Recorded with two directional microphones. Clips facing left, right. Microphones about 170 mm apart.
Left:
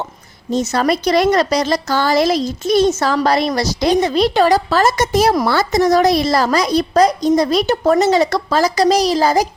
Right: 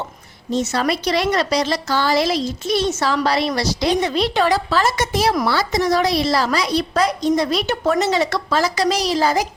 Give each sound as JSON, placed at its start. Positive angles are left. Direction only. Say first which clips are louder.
{"t": 0.7, "sound": "a woman's voice", "louder": "left 7 dB", "side_deg": 45}